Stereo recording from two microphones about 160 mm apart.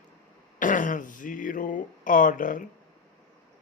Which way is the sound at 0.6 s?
55° left (ahead or behind).